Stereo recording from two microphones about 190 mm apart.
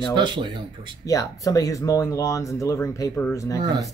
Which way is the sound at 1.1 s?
20° left (ahead or behind).